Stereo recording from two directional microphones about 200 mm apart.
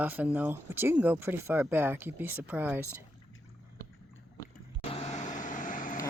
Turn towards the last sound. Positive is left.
turn(degrees=40)  # may be behind; listen again after turning